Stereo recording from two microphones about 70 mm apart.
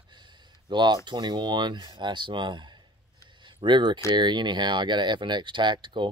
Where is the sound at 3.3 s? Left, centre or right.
Right.